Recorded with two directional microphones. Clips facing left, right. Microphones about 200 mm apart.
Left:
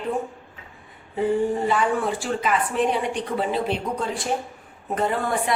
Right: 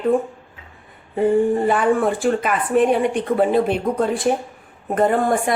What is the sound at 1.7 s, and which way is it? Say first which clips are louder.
Speech: right 5 dB; 55° right (ahead or behind).